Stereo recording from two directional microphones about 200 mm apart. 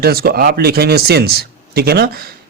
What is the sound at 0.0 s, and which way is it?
Speech, 50° right (ahead or behind).